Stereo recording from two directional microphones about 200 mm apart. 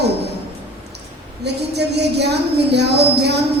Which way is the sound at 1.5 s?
55° right (ahead or behind).